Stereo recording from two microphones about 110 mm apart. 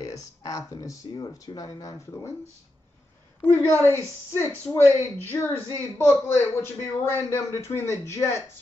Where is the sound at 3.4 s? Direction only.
25° left (ahead or behind).